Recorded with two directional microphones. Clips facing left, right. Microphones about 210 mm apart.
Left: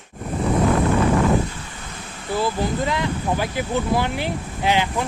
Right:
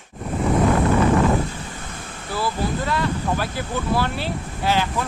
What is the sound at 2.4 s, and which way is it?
Speech, 15° left (ahead or behind).